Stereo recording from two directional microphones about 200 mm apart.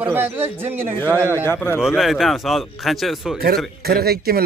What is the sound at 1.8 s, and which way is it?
Speech, centre (ahead or behind).